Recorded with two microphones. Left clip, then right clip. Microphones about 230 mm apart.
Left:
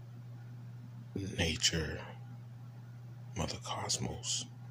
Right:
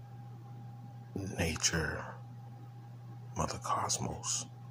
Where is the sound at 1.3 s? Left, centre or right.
Centre.